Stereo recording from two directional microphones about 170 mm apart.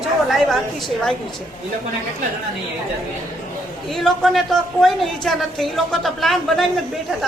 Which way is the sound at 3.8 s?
Centre (ahead or behind).